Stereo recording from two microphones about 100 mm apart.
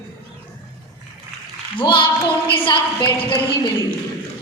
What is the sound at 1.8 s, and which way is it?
A woman's voice, 55° left (ahead or behind).